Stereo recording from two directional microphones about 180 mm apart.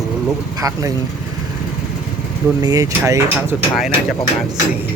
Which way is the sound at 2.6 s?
20° right (ahead or behind).